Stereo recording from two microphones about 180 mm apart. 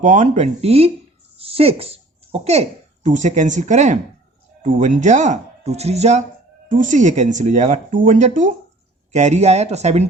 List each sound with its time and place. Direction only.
0.0 s a woman's voice: 45° right (ahead or behind)